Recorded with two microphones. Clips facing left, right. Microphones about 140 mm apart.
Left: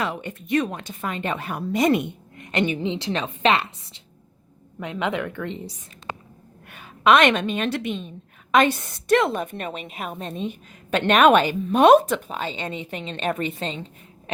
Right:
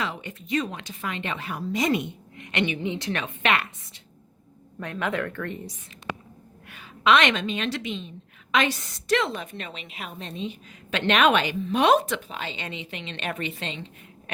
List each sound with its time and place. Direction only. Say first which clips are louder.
0.0 s a woman's voice: left 4 dB; 50° left (ahead or behind)
2.5 s a woman's voice: left 3 dB; 40° left (ahead or behind)
2.8 s a woman's voice: left 3 dB; 25° left (ahead or behind)
4.8 s a woman's voice: left 2 dB; 20° left (ahead or behind)
6.7 s a woman's voice: left 4 dB; 50° left (ahead or behind)